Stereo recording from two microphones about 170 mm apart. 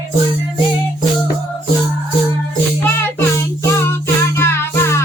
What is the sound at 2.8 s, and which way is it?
Music, 15° left (ahead or behind).